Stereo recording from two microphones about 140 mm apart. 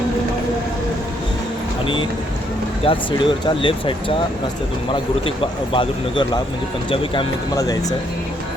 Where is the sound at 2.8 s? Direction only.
35° left (ahead or behind).